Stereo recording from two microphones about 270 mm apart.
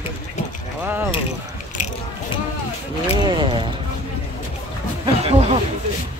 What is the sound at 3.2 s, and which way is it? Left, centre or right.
Speech, centre.